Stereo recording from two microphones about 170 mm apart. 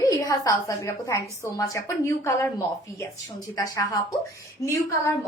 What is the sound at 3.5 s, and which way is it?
Speech, 20° left (ahead or behind).